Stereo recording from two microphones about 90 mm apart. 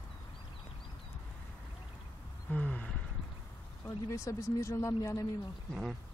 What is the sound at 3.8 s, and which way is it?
Speech, 35° left (ahead or behind).